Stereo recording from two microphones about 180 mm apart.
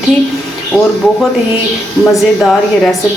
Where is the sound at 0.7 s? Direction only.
Centre (ahead or behind).